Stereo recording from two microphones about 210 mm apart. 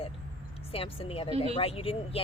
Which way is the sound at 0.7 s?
25° left (ahead or behind).